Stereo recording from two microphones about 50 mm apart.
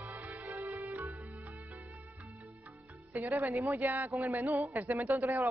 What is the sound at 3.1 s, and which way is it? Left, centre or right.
Music, right.